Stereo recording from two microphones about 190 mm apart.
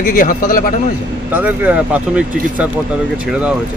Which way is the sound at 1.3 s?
10° right (ahead or behind).